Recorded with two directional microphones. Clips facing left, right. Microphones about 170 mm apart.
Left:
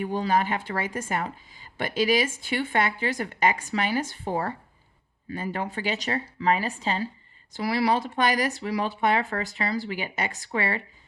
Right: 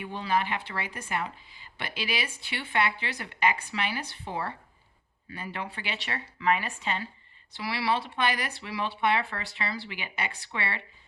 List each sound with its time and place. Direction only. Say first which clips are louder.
0.0 s speech: left 5 dB; 45° left (ahead or behind)